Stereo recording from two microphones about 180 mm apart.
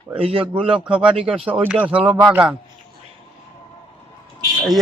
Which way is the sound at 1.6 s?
10° right (ahead or behind).